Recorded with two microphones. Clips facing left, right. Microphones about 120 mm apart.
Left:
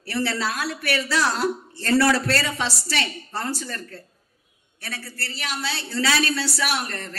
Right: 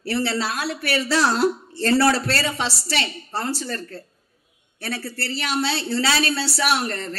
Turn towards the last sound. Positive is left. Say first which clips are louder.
# right 5 dB
turn(degrees=-30)  # may be behind; listen again after turning